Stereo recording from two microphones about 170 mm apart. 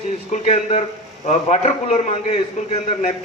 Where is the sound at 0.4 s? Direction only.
40° left (ahead or behind).